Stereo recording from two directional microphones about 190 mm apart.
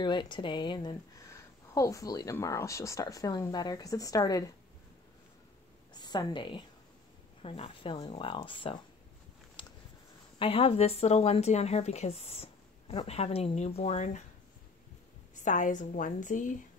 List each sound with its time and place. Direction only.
0.0 s speech: 25° left (ahead or behind)
5.9 s a woman's voice: 20° left (ahead or behind)
9.6 s a sound: 25° left (ahead or behind)
10.4 s speech: 30° left (ahead or behind)
15.4 s speech: 40° left (ahead or behind)